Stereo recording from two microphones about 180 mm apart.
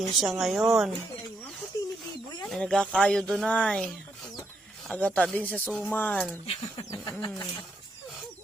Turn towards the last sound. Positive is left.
turn(degrees=20)  # may be behind; listen again after turning